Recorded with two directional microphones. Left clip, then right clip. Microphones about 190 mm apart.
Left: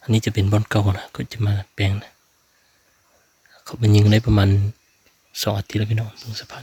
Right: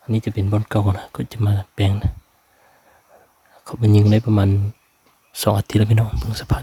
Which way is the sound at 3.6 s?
15° right (ahead or behind).